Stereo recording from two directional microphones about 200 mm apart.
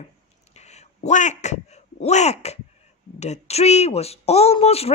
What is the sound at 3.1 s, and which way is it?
Speech, 35° left (ahead or behind).